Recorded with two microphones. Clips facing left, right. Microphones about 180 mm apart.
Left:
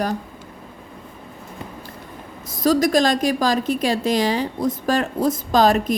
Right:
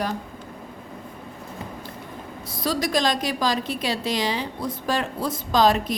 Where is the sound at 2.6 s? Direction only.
45° left (ahead or behind).